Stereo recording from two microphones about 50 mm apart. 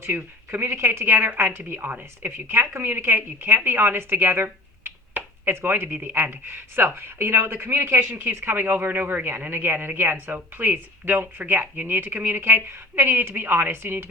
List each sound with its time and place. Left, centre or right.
0.1 s speech: right
0.5 s speech: right